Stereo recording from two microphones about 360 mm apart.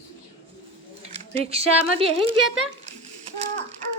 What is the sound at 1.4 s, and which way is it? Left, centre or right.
Speech, centre.